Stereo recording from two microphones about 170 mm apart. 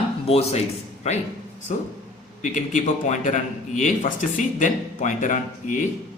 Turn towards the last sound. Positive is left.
turn(degrees=50)  # may be behind; listen again after turning